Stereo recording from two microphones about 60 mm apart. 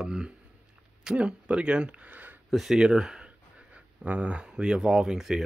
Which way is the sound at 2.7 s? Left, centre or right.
Centre.